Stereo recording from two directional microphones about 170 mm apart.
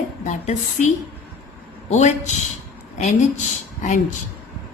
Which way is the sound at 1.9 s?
45° left (ahead or behind).